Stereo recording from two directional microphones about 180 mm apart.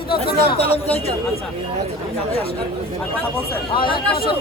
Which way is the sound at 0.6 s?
35° left (ahead or behind).